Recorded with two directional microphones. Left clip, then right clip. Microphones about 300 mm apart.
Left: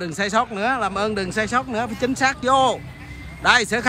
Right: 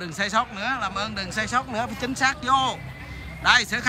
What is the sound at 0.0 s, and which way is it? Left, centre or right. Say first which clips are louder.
Speech: left 3 dB; centre.